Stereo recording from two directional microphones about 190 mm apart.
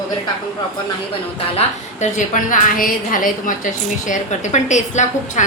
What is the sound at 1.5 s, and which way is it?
A woman's voice, 40° left (ahead or behind).